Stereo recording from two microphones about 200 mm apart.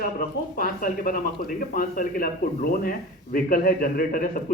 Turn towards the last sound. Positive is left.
turn(degrees=45)  # may be behind; listen again after turning